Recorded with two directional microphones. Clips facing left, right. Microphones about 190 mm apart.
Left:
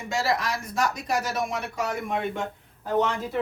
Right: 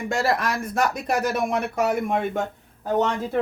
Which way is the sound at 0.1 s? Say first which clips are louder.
Right 2 dB; 55° right (ahead or behind).